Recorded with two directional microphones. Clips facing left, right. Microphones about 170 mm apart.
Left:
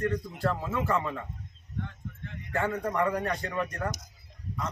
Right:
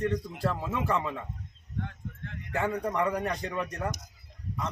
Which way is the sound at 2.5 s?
10° right (ahead or behind).